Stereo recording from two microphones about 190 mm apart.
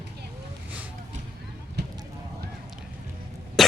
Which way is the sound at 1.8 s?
60° right (ahead or behind).